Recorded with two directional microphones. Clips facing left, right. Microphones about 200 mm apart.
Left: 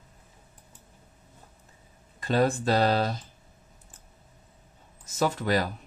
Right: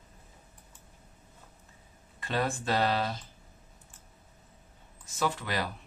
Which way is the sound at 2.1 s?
40° left (ahead or behind).